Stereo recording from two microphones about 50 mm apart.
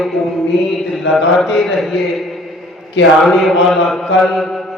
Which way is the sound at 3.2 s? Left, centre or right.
Centre.